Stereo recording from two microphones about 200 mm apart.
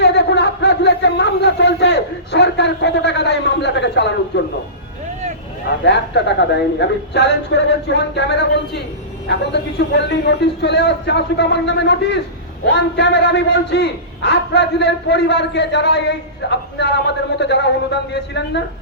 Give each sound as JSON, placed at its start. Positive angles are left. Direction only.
{"t": 0.0, "sound": "a sound", "side_deg": 55}
{"t": 4.3, "sound": "a man's voice", "side_deg": 55}
{"t": 5.6, "sound": "a man's voice", "side_deg": 60}